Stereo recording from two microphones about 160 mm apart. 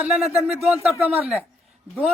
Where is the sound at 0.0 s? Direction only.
5° right (ahead or behind).